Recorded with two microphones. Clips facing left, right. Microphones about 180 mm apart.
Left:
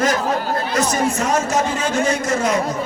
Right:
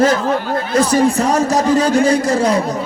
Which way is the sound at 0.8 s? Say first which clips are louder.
Right 8 dB; 35° right (ahead or behind).